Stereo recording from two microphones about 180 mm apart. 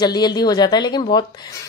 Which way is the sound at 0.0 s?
20° left (ahead or behind).